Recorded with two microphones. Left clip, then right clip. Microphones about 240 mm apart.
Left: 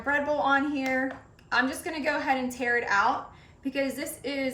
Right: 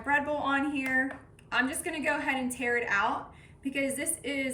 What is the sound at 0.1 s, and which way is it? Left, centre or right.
A woman's voice, centre.